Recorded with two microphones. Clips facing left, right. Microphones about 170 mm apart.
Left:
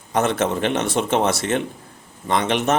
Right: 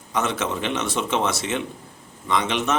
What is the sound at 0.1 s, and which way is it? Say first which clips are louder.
A man's voice: left 5 dB; 55° left (ahead or behind).